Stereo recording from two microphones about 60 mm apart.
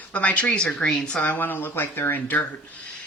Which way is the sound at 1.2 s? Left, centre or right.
Left.